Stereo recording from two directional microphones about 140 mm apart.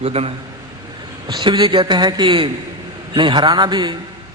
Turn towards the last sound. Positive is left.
turn(degrees=-30)  # may be behind; listen again after turning